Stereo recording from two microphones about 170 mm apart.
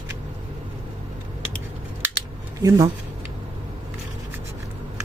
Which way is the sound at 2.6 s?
20° right (ahead or behind).